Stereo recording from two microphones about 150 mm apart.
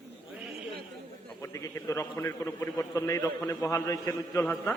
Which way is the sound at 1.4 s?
20° left (ahead or behind).